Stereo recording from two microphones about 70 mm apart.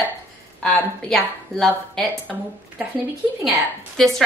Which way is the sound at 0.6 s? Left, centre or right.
Centre.